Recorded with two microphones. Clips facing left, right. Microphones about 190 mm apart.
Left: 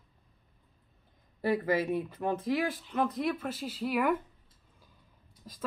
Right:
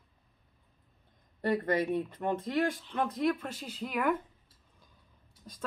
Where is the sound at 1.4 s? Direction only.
5° left (ahead or behind).